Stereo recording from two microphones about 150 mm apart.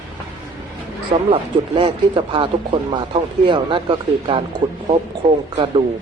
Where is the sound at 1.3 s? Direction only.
35° right (ahead or behind).